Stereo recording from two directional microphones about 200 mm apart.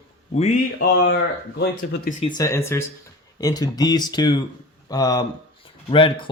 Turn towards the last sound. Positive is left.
turn(degrees=25)  # may be behind; listen again after turning